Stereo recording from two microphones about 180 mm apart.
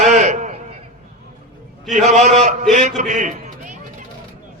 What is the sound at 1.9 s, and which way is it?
Speech, 40° right (ahead or behind).